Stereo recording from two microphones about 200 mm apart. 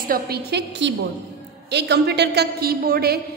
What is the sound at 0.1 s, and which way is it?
A woman's voice, 55° right (ahead or behind).